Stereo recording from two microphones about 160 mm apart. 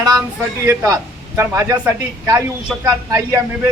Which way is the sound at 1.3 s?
15° right (ahead or behind).